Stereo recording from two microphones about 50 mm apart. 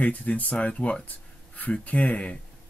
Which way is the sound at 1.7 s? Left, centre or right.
Left.